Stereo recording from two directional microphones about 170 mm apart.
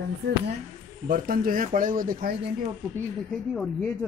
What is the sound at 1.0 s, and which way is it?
Speech, 55° right (ahead or behind).